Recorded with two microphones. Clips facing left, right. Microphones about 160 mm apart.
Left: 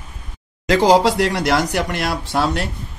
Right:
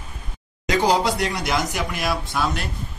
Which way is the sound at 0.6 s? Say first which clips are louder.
Left 6 dB; 75° left (ahead or behind).